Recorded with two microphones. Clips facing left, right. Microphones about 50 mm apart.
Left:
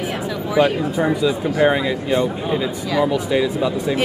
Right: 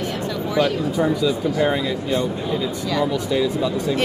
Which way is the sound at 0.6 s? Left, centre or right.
Centre.